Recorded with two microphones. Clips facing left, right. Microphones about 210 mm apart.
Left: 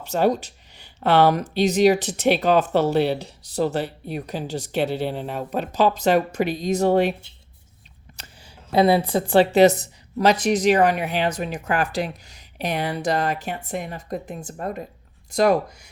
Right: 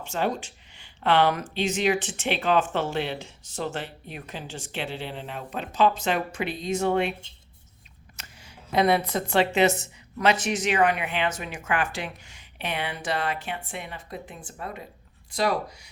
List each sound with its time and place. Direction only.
0.0 s speech: 40° left (ahead or behind)
8.2 s a sound: 30° left (ahead or behind)
8.7 s speech: 30° left (ahead or behind); by 15.9 s 50° left (ahead or behind)